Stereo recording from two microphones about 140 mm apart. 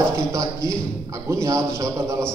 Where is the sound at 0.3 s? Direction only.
20° right (ahead or behind).